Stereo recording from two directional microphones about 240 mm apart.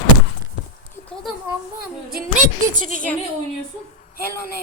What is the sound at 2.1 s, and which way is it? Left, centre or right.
Speech, right.